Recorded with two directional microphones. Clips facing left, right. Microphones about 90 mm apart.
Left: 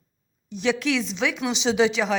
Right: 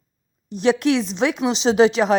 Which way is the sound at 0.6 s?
50° right (ahead or behind).